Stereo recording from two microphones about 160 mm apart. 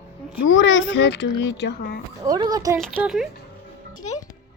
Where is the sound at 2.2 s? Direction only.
25° right (ahead or behind).